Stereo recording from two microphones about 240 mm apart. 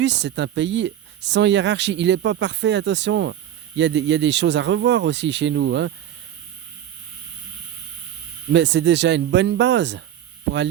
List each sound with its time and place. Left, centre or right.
0.0 s speech: right
8.5 s speech: right